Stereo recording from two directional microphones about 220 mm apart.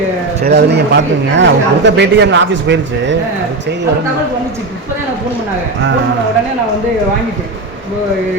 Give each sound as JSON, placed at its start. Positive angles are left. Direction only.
{"t": 0.4, "sound": "speech", "side_deg": -50}